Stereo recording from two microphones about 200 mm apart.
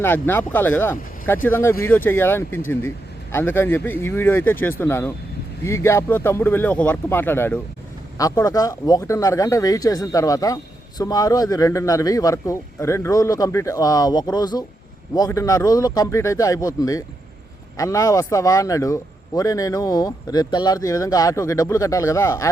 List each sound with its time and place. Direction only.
0.0 s speech: 10° left (ahead or behind)